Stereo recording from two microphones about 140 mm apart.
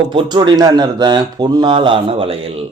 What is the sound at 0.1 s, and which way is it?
Speech, 35° right (ahead or behind).